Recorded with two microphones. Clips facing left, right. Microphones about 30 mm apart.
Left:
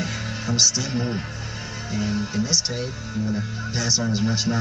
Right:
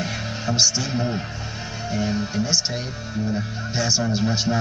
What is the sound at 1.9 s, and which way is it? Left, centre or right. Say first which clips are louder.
Speech: right 1 dB; right.